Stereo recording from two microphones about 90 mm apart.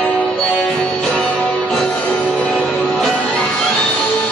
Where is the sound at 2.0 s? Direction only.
15° left (ahead or behind).